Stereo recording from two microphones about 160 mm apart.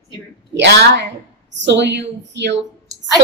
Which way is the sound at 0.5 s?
90° right.